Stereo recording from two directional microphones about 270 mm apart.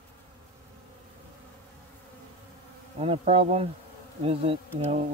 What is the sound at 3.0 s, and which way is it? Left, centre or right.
Speech, right.